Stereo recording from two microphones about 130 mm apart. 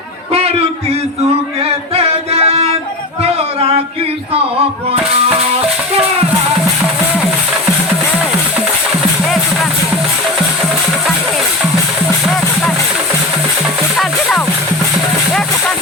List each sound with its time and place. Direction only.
2.0 s music: 50° right (ahead or behind)
14.0 s music: 5° left (ahead or behind)